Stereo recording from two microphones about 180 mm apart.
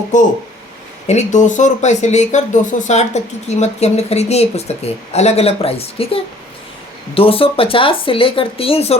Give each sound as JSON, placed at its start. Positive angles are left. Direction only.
{"t": 0.1, "sound": "speech", "side_deg": 40}